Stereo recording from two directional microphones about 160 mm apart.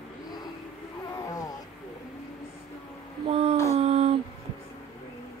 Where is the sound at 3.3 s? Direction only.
40° right (ahead or behind).